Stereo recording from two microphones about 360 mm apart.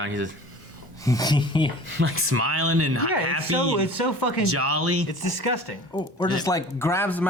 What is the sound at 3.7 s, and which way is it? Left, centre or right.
Speech, left.